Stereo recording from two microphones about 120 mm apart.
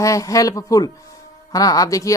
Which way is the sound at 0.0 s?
25° left (ahead or behind).